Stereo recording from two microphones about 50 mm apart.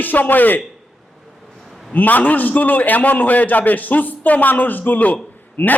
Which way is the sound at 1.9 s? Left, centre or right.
Left.